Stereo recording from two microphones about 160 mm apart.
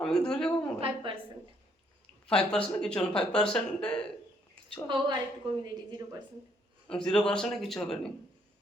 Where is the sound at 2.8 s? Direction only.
5° left (ahead or behind).